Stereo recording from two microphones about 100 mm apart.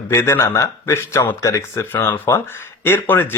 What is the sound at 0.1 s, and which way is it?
Speech, 30° left (ahead or behind).